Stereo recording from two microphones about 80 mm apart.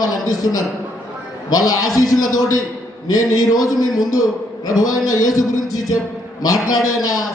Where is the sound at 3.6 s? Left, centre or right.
Left.